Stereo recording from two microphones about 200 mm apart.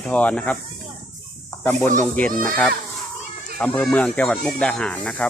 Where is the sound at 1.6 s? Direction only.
5° left (ahead or behind).